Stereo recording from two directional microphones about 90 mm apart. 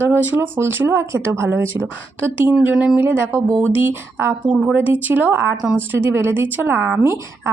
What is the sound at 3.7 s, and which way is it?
Speech, 25° right (ahead or behind).